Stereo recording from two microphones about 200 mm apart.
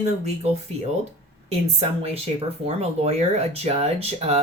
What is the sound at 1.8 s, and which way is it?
Speech, 30° right (ahead or behind).